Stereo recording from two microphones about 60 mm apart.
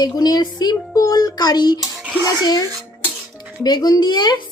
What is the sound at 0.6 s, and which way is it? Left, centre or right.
Speech, left.